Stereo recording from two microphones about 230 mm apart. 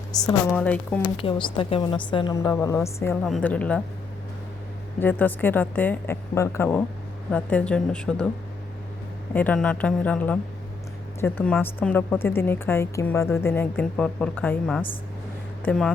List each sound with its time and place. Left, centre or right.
0.3 s a woman's voice: centre
1.2 s a woman's voice: left; by 3.8 s centre
4.9 s a woman's voice: centre
9.3 s a woman's voice: centre